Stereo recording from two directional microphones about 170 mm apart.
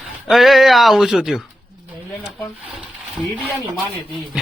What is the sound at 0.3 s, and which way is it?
A man's voice, centre (ahead or behind).